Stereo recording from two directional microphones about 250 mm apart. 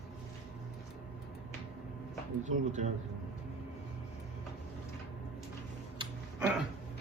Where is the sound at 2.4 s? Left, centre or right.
Right.